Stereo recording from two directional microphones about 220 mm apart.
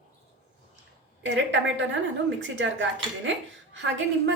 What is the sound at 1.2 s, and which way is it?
A woman's voice, 55° right (ahead or behind).